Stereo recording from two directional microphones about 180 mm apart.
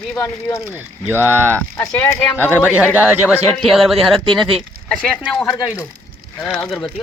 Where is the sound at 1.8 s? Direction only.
10° left (ahead or behind).